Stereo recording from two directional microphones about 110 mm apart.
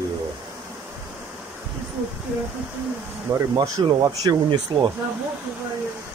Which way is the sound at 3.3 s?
30° right (ahead or behind).